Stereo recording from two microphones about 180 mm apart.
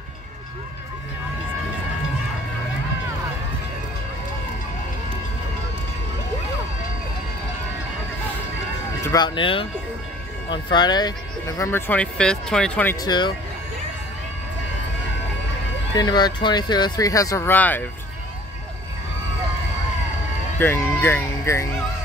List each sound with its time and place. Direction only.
9.0 s speech: 20° left (ahead or behind); by 12.9 s 5° left (ahead or behind)
13.0 s speech: 25° left (ahead or behind)
16.0 s speech: 25° left (ahead or behind)
20.5 s speech: 15° left (ahead or behind)